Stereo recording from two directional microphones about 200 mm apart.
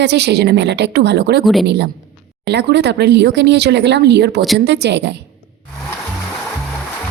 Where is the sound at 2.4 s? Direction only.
60° right (ahead or behind).